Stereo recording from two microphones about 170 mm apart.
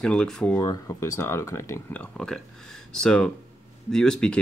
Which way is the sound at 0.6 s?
20° left (ahead or behind).